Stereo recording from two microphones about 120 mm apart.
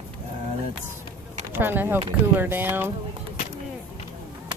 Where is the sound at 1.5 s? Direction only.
20° right (ahead or behind).